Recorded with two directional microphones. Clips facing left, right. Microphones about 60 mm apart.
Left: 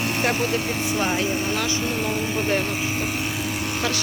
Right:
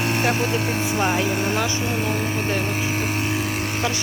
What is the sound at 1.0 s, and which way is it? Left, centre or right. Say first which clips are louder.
Speech: right 3 dB; right.